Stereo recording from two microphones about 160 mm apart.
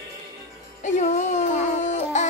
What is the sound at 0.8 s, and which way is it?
Music, 45° left (ahead or behind).